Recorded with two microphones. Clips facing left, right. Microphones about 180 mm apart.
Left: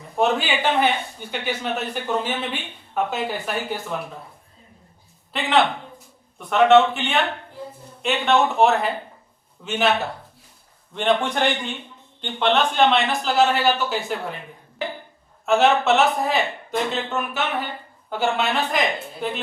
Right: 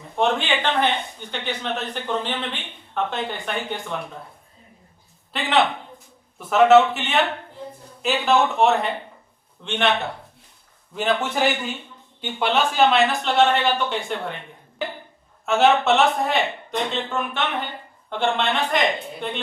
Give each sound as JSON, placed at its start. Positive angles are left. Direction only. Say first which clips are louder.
{"t": 0.2, "sound": "speech", "louder": "left 1 dB", "side_deg": 5}
{"t": 5.3, "sound": "a man's voice", "louder": "left 1 dB", "side_deg": 0}